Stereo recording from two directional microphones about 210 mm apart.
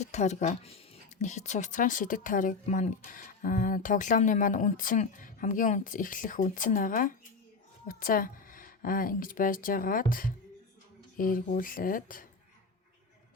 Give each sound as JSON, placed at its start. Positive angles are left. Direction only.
{"t": 0.0, "sound": "speech", "side_deg": 35}